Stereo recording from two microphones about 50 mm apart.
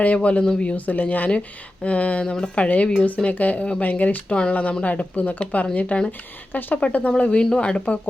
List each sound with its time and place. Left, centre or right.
0.0 s speech: left
2.2 s a woman's voice: centre
2.6 s speech: left
7.2 s speech: left